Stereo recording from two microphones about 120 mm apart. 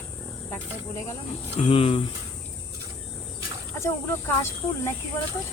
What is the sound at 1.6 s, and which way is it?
Speech, 50° left (ahead or behind).